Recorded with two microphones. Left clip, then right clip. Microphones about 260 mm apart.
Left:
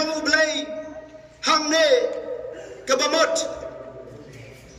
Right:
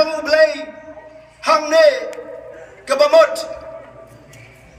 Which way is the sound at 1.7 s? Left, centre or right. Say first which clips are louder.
Right 8 dB; right.